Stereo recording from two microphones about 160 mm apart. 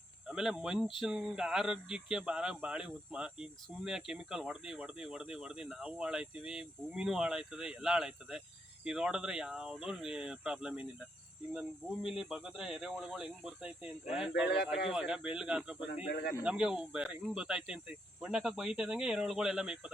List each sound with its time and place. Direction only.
0.3 s speech: 5° right (ahead or behind)
12.0 s speech: 5° right (ahead or behind)